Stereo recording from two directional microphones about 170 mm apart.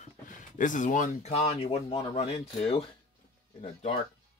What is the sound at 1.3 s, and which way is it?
Speech, 35° left (ahead or behind).